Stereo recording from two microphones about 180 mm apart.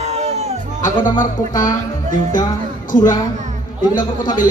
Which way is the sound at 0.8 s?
45° left (ahead or behind).